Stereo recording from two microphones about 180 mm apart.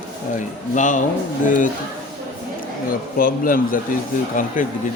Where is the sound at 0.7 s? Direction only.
45° left (ahead or behind).